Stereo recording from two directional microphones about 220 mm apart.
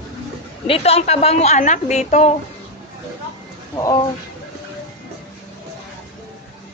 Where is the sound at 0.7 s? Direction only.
25° left (ahead or behind).